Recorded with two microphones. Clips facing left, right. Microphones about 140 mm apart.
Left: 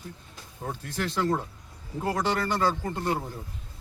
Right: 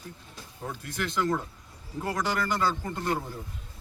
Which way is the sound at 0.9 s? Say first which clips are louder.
Left 1 dB; 30° left (ahead or behind).